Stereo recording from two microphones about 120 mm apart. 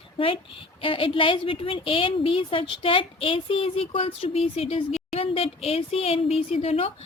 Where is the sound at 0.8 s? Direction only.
50° left (ahead or behind).